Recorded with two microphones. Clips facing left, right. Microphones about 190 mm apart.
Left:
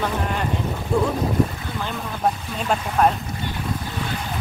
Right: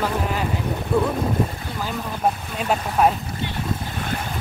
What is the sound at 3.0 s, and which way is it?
Speech, 5° right (ahead or behind).